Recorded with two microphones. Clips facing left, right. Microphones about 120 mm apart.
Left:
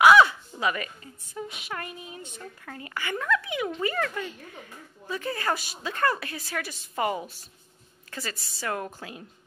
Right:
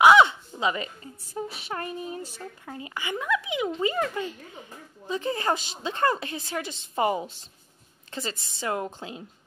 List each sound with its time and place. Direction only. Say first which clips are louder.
0.0 s a sound: even; 20° right (ahead or behind)
1.3 s speech: right 3 dB; 30° right (ahead or behind)
2.6 s a woman's voice: even; 20° right (ahead or behind)